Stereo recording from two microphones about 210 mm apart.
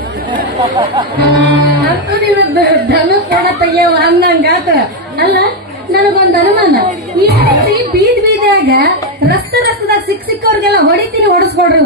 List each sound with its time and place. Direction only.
0.6 s speech: 25° right (ahead or behind)
1.2 s a woman's voice: 50° right (ahead or behind)